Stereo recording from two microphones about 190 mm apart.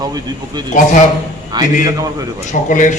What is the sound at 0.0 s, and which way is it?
Speech, 20° right (ahead or behind).